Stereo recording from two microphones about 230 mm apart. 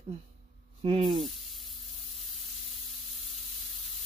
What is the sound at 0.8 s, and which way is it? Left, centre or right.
Speech, right.